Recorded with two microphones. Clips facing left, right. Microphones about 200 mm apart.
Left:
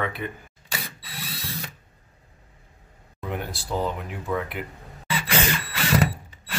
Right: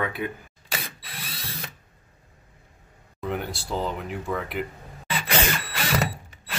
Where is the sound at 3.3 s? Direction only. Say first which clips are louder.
Even; centre (ahead or behind).